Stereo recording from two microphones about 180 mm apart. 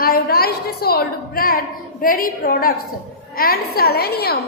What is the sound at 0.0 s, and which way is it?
A woman's voice, 55° left (ahead or behind).